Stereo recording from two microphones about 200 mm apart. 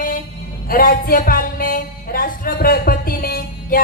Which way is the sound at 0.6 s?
45° left (ahead or behind).